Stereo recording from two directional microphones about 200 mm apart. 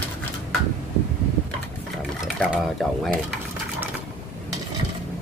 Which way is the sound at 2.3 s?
Centre (ahead or behind).